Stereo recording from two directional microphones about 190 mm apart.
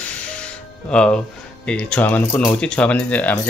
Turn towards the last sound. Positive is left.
turn(degrees=5)  # may be behind; listen again after turning